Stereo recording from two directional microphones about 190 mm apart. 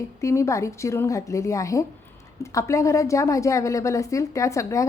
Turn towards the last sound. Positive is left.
turn(degrees=15)  # may be behind; listen again after turning